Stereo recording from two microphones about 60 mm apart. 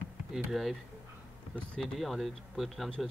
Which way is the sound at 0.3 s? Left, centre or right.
Centre.